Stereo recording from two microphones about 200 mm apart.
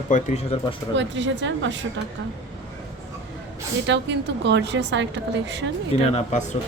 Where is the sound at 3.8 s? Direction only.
60° right (ahead or behind).